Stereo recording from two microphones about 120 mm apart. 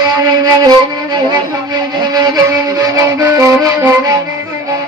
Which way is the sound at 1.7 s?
35° right (ahead or behind).